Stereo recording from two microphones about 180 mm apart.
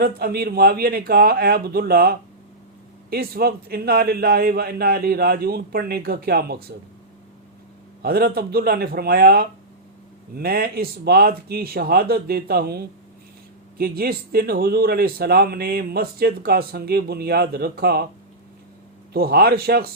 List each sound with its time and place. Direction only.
0.0 s speech: 60° right (ahead or behind)
8.0 s speech: 60° right (ahead or behind)
19.1 s speech: 60° right (ahead or behind)